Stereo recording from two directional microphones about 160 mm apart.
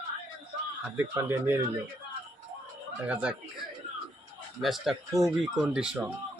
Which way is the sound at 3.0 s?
10° right (ahead or behind).